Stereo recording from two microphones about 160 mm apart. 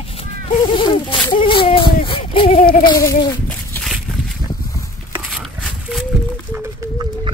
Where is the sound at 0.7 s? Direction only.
30° left (ahead or behind).